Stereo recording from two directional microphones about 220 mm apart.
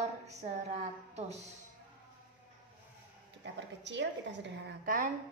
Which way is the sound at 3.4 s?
55° right (ahead or behind).